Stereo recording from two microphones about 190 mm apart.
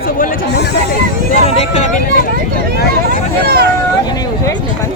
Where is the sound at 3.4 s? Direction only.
55° right (ahead or behind).